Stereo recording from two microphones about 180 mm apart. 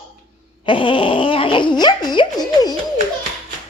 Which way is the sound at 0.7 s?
30° left (ahead or behind).